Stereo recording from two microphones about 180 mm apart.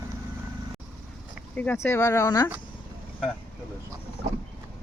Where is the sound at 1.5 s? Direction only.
10° left (ahead or behind).